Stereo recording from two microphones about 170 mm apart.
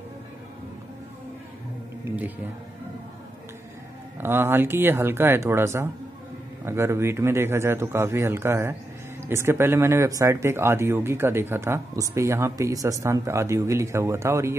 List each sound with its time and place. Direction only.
4.2 s speech: 15° right (ahead or behind)